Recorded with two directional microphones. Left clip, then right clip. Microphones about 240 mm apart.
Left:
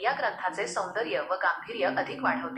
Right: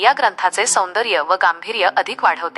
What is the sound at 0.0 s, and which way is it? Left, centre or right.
A woman's voice, right.